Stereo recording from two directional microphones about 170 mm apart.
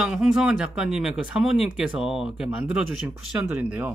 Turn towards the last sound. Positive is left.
turn(degrees=-5)  # may be behind; listen again after turning